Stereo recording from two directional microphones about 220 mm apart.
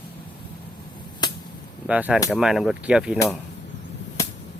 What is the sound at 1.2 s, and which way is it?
Vehicle, 20° left (ahead or behind).